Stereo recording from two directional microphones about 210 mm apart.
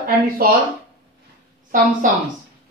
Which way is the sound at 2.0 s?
40° right (ahead or behind).